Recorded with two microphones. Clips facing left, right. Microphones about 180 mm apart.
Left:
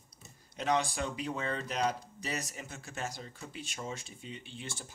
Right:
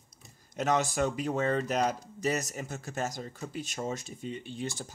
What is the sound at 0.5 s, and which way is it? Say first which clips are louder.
Speech: right 3 dB; 45° right (ahead or behind).